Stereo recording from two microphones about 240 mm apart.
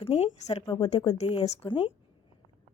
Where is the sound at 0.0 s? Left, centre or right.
Left.